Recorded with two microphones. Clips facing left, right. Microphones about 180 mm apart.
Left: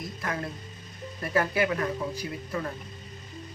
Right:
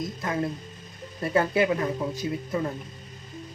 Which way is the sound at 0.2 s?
20° right (ahead or behind).